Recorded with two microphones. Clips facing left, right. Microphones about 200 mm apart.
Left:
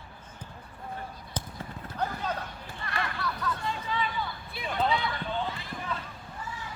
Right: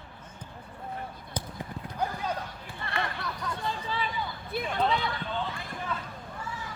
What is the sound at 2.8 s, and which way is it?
Hubbub, 25° right (ahead or behind).